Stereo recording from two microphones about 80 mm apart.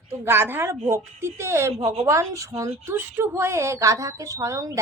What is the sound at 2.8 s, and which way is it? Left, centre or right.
A woman's voice, right.